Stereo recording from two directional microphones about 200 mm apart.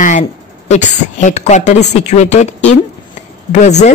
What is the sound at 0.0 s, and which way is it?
A woman's voice, 35° left (ahead or behind).